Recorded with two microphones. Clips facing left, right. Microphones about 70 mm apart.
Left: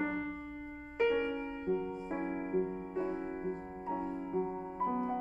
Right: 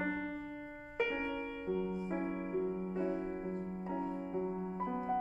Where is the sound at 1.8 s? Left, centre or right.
Centre.